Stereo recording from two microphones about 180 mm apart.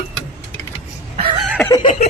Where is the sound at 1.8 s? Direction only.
35° left (ahead or behind).